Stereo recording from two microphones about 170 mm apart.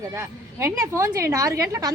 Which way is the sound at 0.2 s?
15° right (ahead or behind).